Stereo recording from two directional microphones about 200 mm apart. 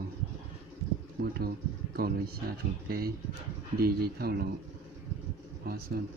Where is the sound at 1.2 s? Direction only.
50° right (ahead or behind).